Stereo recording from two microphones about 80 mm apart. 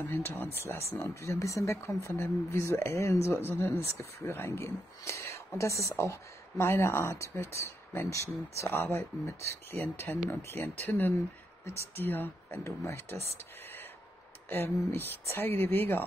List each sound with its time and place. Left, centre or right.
0.0 s speech: left
8.6 s speech: left
10.1 s speech: centre; by 13.0 s left
14.5 s speech: left